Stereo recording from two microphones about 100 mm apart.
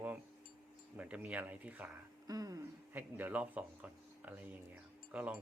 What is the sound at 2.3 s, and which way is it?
Speech, 40° right (ahead or behind).